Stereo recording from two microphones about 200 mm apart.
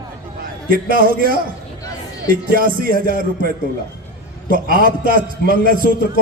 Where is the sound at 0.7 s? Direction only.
45° right (ahead or behind).